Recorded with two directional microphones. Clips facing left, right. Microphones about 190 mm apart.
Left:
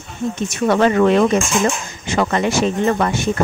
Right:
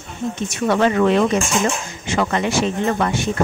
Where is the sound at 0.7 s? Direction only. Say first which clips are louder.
Left 2 dB; 45° left (ahead or behind).